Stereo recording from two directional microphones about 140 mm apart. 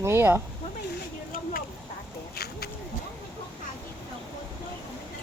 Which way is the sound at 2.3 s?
90° left.